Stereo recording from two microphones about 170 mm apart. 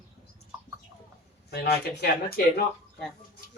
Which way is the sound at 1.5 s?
75° left (ahead or behind).